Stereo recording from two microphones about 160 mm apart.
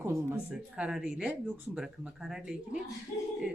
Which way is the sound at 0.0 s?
15° right (ahead or behind).